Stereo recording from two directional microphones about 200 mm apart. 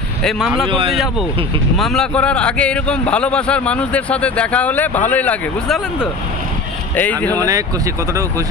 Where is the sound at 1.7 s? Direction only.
Centre (ahead or behind).